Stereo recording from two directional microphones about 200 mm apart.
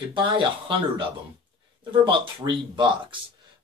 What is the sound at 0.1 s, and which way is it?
Speech, 25° right (ahead or behind).